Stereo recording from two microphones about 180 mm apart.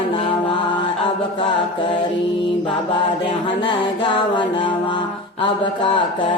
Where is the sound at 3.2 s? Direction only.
25° left (ahead or behind).